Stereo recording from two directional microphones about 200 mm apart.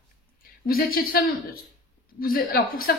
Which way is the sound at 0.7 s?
45° left (ahead or behind).